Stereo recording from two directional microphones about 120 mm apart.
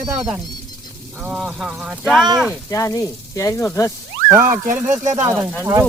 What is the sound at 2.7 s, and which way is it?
Speech, 25° left (ahead or behind).